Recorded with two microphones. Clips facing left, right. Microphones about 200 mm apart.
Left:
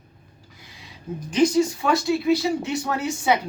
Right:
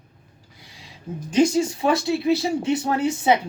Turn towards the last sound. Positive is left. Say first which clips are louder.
# right 3 dB
turn(degrees=-25)  # may be behind; listen again after turning